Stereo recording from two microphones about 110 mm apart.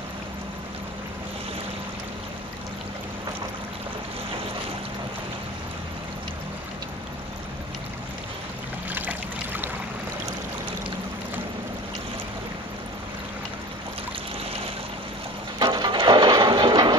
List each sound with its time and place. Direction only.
8.9 s boat: 15° right (ahead or behind)
15.6 s music: 45° right (ahead or behind)